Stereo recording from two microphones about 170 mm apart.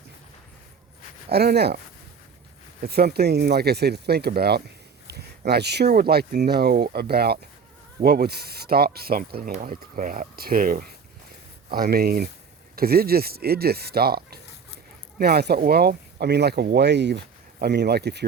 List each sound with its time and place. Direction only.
1.3 s speech: 70° right (ahead or behind)
2.8 s speech: 65° right (ahead or behind)